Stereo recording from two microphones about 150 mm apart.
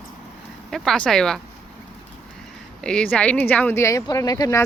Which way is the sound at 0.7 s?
5° left (ahead or behind).